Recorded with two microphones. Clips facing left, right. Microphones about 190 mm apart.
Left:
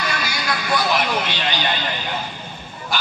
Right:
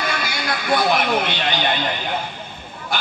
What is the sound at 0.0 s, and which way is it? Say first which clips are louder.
Speech: right 1 dB; 55° right (ahead or behind).